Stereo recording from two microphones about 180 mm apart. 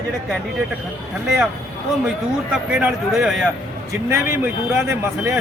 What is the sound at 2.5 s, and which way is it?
Speech, 5° right (ahead or behind).